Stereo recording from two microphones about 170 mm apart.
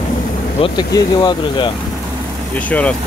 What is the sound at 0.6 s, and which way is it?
Speech, 25° left (ahead or behind).